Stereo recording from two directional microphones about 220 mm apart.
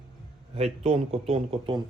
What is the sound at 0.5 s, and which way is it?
A man's voice, 30° right (ahead or behind).